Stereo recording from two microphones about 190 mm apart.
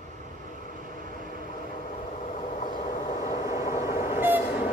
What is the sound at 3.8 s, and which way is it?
Train, 15° right (ahead or behind).